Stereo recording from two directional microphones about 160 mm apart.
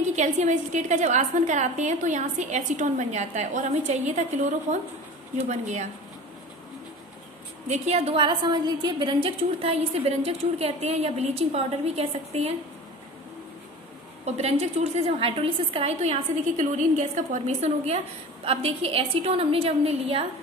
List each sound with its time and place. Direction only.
0.1 s a woman's voice: 45° right (ahead or behind)
7.6 s a woman's voice: 45° right (ahead or behind)
14.2 s a woman's voice: 40° right (ahead or behind)